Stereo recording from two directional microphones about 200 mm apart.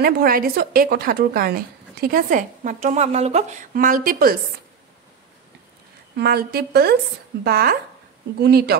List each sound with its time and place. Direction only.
0.0 s a woman's voice: 50° right (ahead or behind)
6.1 s a woman's voice: 55° right (ahead or behind)